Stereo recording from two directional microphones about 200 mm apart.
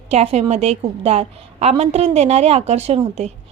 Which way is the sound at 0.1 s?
30° right (ahead or behind).